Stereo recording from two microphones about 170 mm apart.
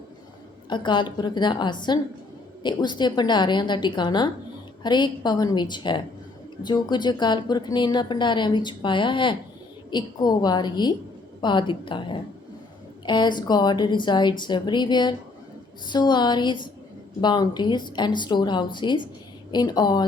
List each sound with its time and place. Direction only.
0.7 s a woman's voice: 25° left (ahead or behind)